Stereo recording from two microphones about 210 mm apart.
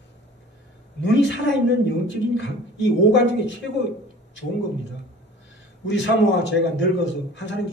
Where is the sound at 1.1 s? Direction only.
60° left (ahead or behind).